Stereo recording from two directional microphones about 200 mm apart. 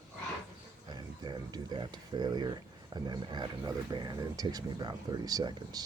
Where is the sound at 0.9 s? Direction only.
20° right (ahead or behind).